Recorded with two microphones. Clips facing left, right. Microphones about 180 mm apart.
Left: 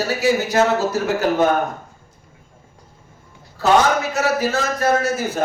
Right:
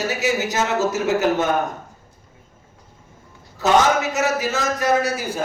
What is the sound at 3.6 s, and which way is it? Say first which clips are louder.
A man's voice: left 1 dB; 20° right (ahead or behind).